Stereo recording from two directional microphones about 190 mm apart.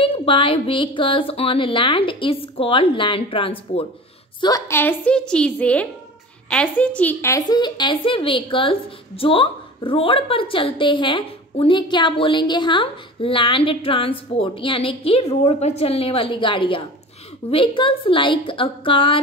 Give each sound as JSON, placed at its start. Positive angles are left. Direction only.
{"t": 0.0, "sound": "a woman's voice", "side_deg": 30}